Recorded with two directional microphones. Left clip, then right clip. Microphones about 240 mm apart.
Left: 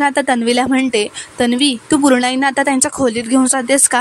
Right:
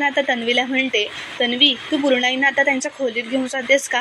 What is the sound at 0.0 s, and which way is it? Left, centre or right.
A woman's voice, left.